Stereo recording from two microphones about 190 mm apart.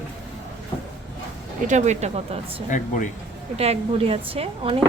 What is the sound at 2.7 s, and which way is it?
Speech, 40° left (ahead or behind).